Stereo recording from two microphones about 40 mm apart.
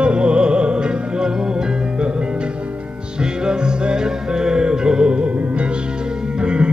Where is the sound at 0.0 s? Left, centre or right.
Right.